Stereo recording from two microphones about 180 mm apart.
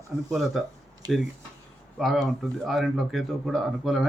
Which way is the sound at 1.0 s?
20° right (ahead or behind).